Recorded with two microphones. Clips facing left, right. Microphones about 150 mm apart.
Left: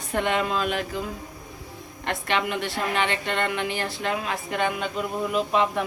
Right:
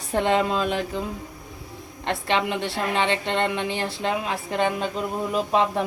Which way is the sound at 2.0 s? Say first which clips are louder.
Right 2 dB; 25° right (ahead or behind).